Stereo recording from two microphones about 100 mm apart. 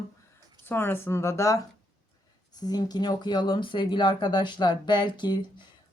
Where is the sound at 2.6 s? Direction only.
40° left (ahead or behind).